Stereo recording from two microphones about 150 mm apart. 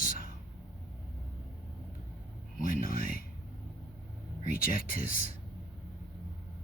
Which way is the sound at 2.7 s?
70° left (ahead or behind).